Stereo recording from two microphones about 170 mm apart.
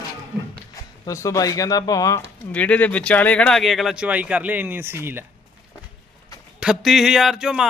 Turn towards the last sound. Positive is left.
turn(degrees=-5)  # may be behind; listen again after turning